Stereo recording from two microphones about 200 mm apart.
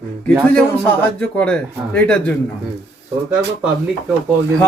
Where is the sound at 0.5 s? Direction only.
5° left (ahead or behind).